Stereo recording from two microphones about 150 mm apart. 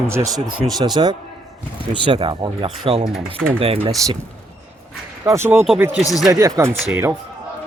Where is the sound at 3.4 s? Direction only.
5° left (ahead or behind).